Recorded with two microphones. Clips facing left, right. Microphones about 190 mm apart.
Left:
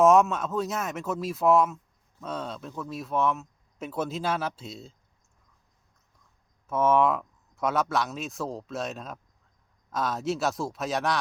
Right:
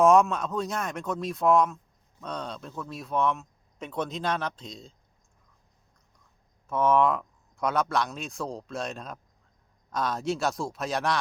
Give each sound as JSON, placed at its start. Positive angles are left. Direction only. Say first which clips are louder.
{"t": 0.0, "sound": "speech", "louder": "even", "side_deg": 0}
{"t": 6.7, "sound": "speech", "louder": "even", "side_deg": 0}